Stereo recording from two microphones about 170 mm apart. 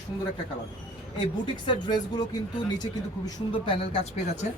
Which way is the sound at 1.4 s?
25° left (ahead or behind).